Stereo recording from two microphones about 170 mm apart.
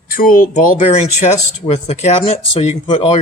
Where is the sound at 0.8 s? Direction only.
40° left (ahead or behind).